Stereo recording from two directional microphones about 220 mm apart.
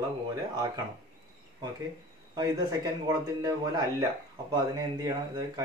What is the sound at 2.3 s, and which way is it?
A man's voice, 15° right (ahead or behind).